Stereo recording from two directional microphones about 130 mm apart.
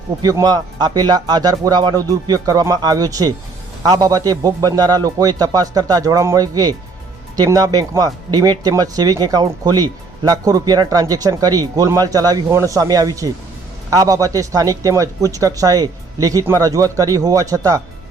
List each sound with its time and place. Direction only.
0.2 s speech: 30° right (ahead or behind)